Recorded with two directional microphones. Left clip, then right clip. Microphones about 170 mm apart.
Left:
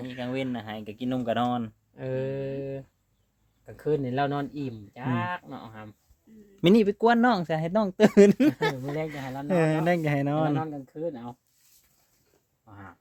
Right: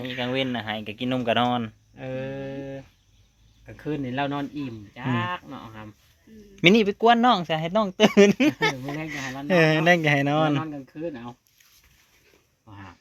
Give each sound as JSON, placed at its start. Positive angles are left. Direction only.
{"t": 0.0, "sound": "speech", "side_deg": -20}
{"t": 2.0, "sound": "a sound", "side_deg": 85}
{"t": 3.7, "sound": "speech", "side_deg": 60}
{"t": 4.9, "sound": "speech", "side_deg": 55}
{"t": 6.7, "sound": "speech", "side_deg": 30}
{"t": 9.3, "sound": "speech", "side_deg": 5}
{"t": 10.6, "sound": "speech", "side_deg": 35}